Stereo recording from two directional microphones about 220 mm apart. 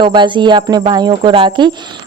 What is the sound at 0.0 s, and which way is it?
Speech, 20° right (ahead or behind).